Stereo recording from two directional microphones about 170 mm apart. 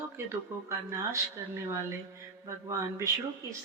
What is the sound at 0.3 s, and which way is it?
A woman's voice, 15° right (ahead or behind).